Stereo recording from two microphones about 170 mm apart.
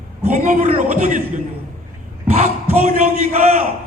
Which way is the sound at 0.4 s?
45° right (ahead or behind).